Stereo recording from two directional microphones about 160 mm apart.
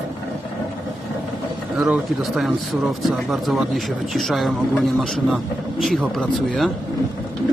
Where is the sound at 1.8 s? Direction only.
5° right (ahead or behind).